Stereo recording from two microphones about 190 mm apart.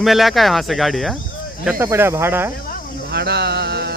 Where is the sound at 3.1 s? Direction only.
60° right (ahead or behind).